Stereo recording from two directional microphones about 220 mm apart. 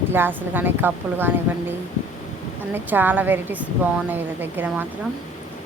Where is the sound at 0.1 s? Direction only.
10° right (ahead or behind).